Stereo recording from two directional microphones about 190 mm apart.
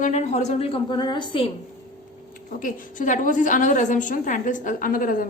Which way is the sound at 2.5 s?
45° left (ahead or behind).